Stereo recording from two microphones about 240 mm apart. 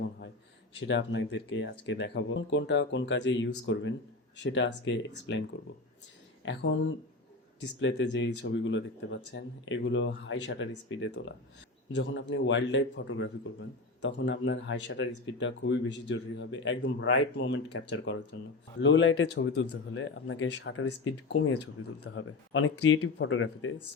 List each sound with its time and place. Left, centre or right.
0.8 s speech: left
6.4 s speech: left